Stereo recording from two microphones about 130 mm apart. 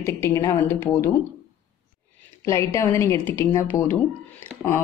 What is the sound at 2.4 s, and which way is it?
Speech, 25° left (ahead or behind).